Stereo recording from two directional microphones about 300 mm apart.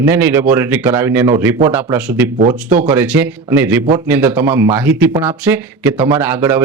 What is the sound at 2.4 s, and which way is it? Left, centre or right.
Speech, right.